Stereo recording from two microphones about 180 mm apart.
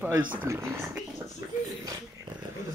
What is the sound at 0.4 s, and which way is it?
Speech, 15° right (ahead or behind).